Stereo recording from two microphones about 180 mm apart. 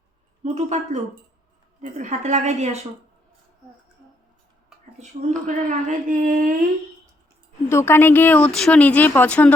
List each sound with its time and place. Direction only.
0.4 s speech: 40° right (ahead or behind)
1.8 s speech: 45° right (ahead or behind)
5.5 s speech: 45° right (ahead or behind)
7.7 s speech: 15° left (ahead or behind)